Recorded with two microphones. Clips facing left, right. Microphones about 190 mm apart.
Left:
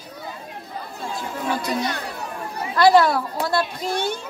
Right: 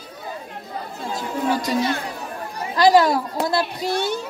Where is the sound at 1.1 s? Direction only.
40° right (ahead or behind).